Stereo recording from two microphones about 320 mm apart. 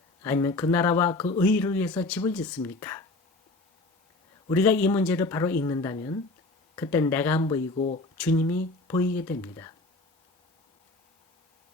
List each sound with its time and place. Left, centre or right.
0.2 s speech: centre
4.4 s speech: centre